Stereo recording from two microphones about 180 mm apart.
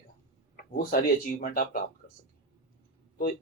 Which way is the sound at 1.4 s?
55° left (ahead or behind).